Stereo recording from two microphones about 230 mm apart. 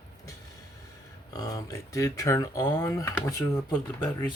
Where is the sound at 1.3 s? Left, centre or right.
Centre.